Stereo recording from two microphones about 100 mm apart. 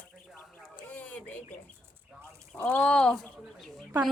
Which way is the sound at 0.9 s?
15° left (ahead or behind).